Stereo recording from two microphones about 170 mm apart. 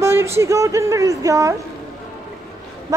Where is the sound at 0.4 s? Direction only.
20° right (ahead or behind).